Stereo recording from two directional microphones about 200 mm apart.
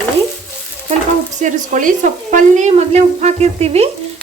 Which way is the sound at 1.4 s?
40° right (ahead or behind).